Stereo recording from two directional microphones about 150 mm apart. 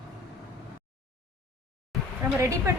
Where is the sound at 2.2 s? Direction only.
15° right (ahead or behind).